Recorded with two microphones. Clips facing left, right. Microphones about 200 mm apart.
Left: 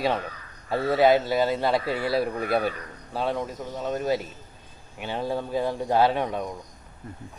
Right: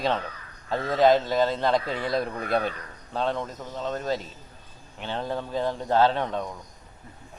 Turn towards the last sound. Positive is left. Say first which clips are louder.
# even
turn(degrees=10)  # may be behind; listen again after turning